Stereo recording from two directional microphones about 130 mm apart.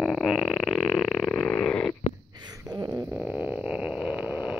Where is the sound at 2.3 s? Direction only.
30° right (ahead or behind).